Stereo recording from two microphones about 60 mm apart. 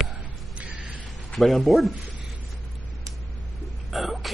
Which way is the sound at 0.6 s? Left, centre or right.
Right.